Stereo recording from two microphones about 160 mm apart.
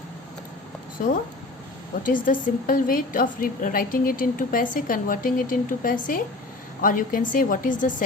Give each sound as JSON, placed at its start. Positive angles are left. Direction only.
{"t": 2.0, "sound": "a woman's voice", "side_deg": 60}